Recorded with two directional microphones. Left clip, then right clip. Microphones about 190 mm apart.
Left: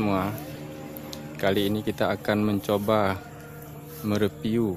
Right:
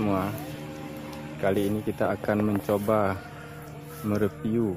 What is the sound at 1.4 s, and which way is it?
Speech, 15° left (ahead or behind).